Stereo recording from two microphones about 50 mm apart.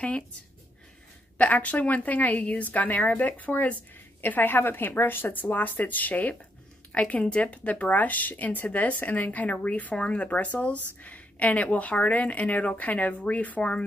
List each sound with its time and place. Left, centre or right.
1.4 s a woman's voice: left
13.6 s a woman's voice: centre